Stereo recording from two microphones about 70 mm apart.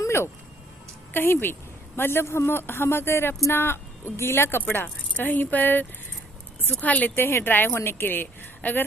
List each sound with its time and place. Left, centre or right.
1.1 s speech: left
7.3 s speech: left